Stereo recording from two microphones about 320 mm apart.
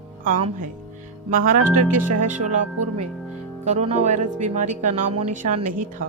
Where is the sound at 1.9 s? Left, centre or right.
Right.